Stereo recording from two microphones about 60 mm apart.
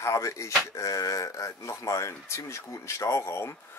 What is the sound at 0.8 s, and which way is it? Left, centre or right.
Speech, left.